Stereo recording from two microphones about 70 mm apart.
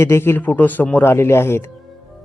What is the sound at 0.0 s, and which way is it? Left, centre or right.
Speech, left.